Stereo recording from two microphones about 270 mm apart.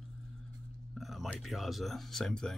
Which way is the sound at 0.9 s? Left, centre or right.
Centre.